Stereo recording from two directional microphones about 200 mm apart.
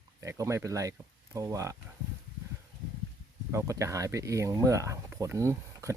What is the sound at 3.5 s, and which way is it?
Speech, 15° right (ahead or behind).